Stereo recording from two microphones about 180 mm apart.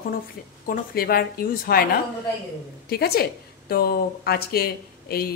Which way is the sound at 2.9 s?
60° left (ahead or behind).